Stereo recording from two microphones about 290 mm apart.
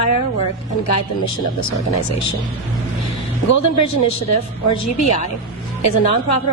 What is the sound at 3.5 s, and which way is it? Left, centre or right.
A woman's voice, left.